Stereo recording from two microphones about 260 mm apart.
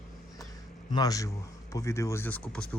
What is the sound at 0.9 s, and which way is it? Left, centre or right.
Speech, centre.